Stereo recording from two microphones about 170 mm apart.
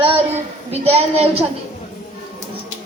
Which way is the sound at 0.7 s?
35° right (ahead or behind).